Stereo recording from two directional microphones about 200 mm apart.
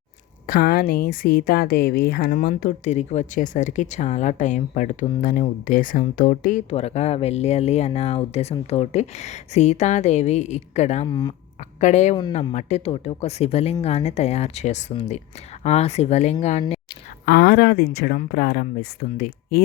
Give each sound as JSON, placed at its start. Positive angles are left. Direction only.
{"t": 0.4, "sound": "speech", "side_deg": 45}
{"t": 11.0, "sound": "speech", "side_deg": 20}
{"t": 11.8, "sound": "speech", "side_deg": 35}
{"t": 17.2, "sound": "speech", "side_deg": 50}